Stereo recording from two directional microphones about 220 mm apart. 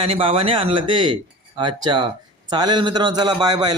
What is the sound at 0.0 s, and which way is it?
Speech, 25° right (ahead or behind).